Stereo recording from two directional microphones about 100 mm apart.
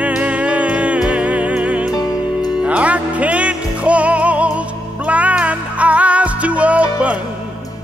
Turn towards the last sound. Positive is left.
turn(degrees=-15)  # may be behind; listen again after turning